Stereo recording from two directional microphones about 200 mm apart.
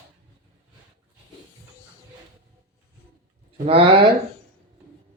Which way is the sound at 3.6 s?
30° right (ahead or behind).